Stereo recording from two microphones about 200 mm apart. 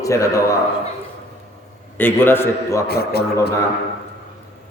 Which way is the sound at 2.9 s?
55° left (ahead or behind).